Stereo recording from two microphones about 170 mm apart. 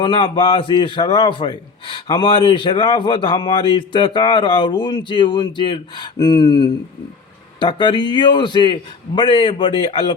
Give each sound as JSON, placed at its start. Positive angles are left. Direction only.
{"t": 0.0, "sound": "a man's voice", "side_deg": 30}